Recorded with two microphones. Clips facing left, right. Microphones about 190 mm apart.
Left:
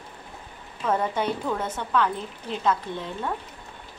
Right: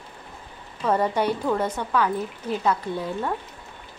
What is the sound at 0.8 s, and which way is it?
A woman's voice, 10° right (ahead or behind).